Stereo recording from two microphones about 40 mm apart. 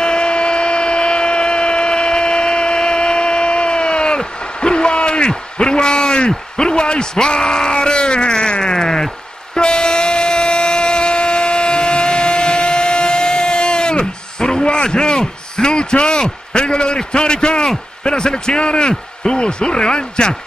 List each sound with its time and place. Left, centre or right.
0.0 s tools: left
9.6 s a sound: centre
18.0 s a man's voice: left